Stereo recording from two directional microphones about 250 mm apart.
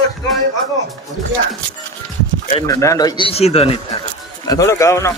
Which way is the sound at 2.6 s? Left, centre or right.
Centre.